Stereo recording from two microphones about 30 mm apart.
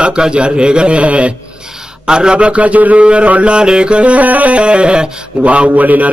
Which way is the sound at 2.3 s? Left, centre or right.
Right.